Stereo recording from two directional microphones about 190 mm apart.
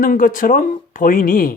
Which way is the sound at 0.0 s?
45° left (ahead or behind).